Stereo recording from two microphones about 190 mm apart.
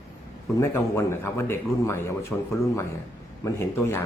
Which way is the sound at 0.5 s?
15° left (ahead or behind).